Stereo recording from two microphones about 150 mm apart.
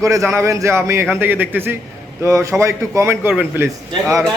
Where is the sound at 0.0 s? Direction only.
20° right (ahead or behind).